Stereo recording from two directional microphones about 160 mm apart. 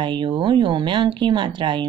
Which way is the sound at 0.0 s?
30° right (ahead or behind).